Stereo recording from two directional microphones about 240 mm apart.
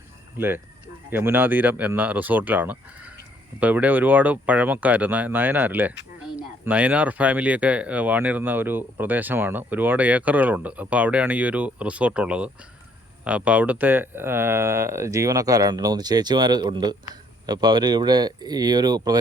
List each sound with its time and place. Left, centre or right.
0.3 s speech: centre